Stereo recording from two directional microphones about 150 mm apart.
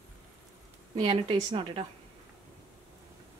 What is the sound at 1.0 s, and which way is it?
Speech, 35° right (ahead or behind).